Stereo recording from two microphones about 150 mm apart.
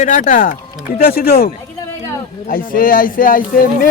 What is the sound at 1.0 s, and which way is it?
Speech, 85° left.